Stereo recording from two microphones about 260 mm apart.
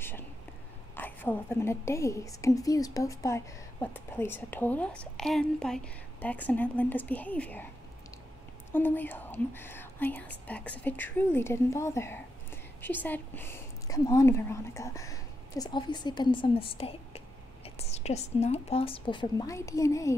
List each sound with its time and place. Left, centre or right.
0.9 s a woman's voice: centre
8.7 s a woman's voice: centre